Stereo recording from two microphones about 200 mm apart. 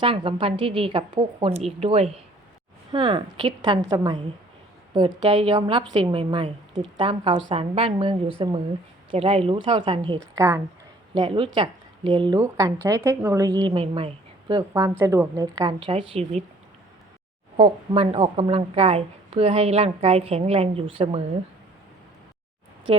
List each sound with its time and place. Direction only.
0.0 s a woman's voice: 25° right (ahead or behind)
17.6 s a woman's voice: 30° right (ahead or behind)
22.9 s a woman's voice: 30° right (ahead or behind)